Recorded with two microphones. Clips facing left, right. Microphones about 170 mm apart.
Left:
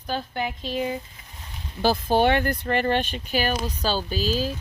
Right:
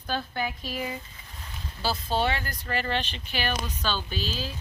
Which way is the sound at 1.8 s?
55° left (ahead or behind).